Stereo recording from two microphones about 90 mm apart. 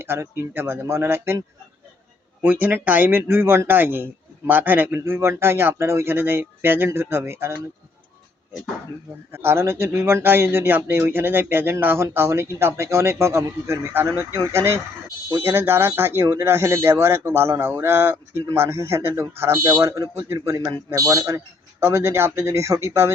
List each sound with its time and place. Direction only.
0.0 s speech: 25° right (ahead or behind)
2.4 s speech: 20° right (ahead or behind)
9.3 s a man's voice: 25° right (ahead or behind)
20.7 s a man's voice: 45° right (ahead or behind)